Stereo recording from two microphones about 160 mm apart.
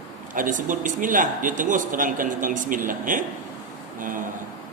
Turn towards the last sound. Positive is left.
turn(degrees=-55)  # may be behind; listen again after turning